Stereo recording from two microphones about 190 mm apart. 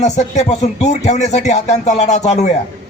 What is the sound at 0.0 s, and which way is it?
A man's voice, 35° left (ahead or behind).